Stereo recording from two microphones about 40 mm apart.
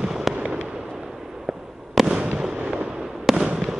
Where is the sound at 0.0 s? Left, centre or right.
Centre.